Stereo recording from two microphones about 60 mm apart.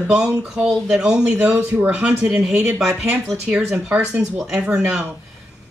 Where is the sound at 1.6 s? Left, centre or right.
Right.